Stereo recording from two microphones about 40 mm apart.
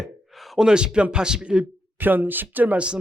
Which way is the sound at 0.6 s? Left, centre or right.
Right.